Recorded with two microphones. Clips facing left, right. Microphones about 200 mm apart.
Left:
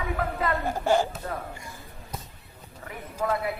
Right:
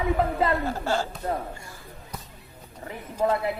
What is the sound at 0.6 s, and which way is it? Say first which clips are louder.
Speech: left 3 dB; 15° left (ahead or behind).